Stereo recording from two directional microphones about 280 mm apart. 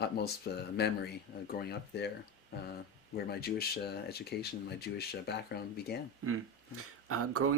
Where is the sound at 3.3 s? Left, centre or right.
Left.